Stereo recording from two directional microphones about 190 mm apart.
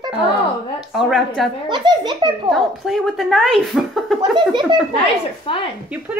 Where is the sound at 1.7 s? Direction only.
25° right (ahead or behind).